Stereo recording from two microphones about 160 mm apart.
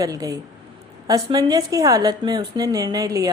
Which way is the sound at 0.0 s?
20° right (ahead or behind).